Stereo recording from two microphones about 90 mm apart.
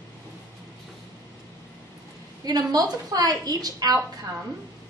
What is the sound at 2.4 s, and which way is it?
A woman's voice, 45° right (ahead or behind).